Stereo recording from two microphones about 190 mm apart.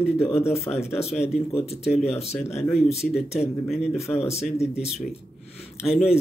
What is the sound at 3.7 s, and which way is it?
Speech, centre (ahead or behind).